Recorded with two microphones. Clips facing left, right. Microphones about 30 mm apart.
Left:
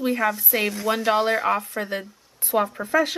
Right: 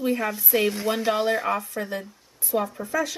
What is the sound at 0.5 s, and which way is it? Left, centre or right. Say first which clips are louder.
Speech: even; centre.